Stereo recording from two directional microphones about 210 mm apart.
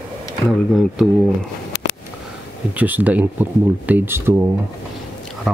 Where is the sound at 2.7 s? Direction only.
10° right (ahead or behind).